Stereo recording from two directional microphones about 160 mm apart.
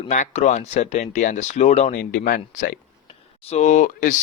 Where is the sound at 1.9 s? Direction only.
65° left (ahead or behind).